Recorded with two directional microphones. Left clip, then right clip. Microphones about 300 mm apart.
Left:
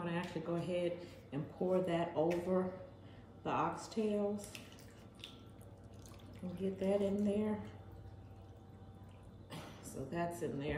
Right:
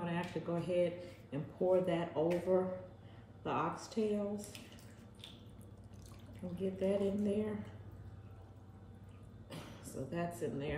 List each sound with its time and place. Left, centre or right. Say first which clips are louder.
0.0 s a man's voice: right 1 dB; centre
6.6 s a man's voice: even; centre
9.5 s speech: even; centre